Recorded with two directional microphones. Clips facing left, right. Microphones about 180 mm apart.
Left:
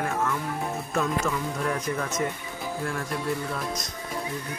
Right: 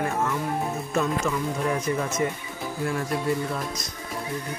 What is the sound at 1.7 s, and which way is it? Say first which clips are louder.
Speech: right 3 dB; 10° right (ahead or behind).